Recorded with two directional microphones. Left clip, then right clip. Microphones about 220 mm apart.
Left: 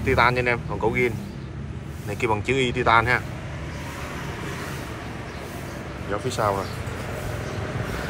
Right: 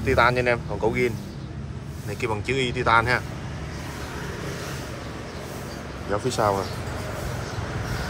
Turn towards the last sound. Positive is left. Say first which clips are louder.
# right 1 dB
turn(degrees=-15)  # may be behind; listen again after turning